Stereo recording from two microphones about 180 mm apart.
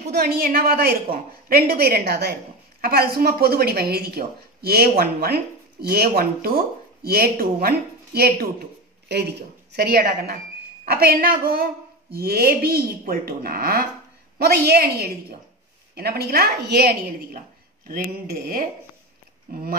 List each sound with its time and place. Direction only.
0.0 s a woman's voice: 60° right (ahead or behind)